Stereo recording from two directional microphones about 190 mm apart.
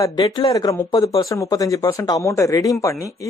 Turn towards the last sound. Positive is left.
turn(degrees=15)  # may be behind; listen again after turning